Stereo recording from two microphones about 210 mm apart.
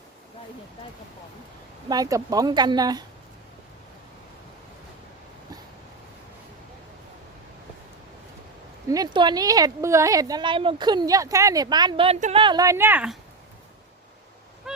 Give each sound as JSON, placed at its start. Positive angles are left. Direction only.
{"t": 1.9, "sound": "speech", "side_deg": -15}
{"t": 8.9, "sound": "a woman's voice", "side_deg": -20}